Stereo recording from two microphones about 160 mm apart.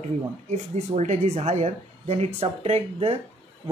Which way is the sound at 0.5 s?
45° right (ahead or behind).